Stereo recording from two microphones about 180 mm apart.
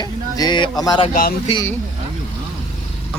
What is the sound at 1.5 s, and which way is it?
Speech, 35° left (ahead or behind).